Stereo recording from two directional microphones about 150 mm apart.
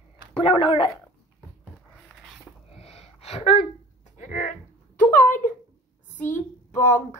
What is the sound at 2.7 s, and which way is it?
Gasp, 40° left (ahead or behind).